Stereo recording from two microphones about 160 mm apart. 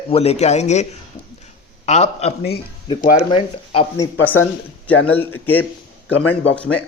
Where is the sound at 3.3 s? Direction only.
35° left (ahead or behind).